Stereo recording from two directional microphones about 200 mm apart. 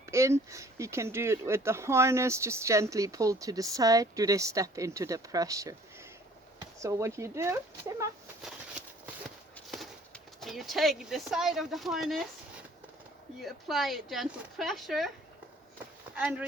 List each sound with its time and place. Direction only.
0.0 s speech: 15° right (ahead or behind)
6.7 s speech: 15° right (ahead or behind)
9.6 s clip-clop: centre (ahead or behind)
10.4 s speech: centre (ahead or behind)
13.4 s speech: centre (ahead or behind)
16.1 s speech: 5° right (ahead or behind)